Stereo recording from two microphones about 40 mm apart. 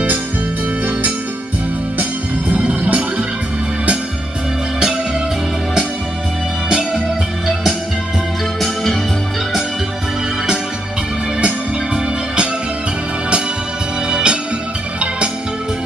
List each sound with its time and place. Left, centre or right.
2.5 s music: right
11.4 s organ: right
14.1 s music: right